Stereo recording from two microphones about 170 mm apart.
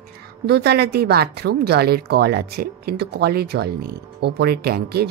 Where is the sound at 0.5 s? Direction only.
75° right (ahead or behind).